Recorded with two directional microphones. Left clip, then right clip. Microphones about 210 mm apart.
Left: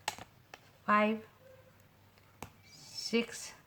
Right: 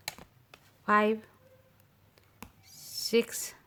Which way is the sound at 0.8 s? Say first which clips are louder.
Right 3 dB; 45° right (ahead or behind).